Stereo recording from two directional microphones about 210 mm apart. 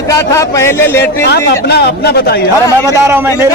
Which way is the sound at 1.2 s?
50° left (ahead or behind).